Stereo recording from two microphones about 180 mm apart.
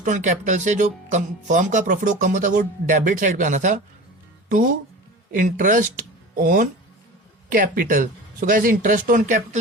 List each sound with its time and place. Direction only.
0.0 s speech: 45° right (ahead or behind)
5.3 s speech: 45° right (ahead or behind)